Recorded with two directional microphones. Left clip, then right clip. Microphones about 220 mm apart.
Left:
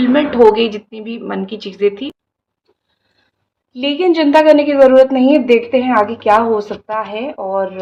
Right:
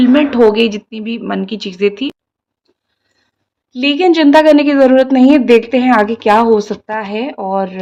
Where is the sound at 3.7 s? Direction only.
45° right (ahead or behind).